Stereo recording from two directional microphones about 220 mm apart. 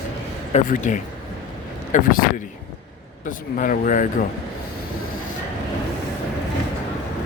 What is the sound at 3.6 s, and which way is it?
Speech, 35° left (ahead or behind).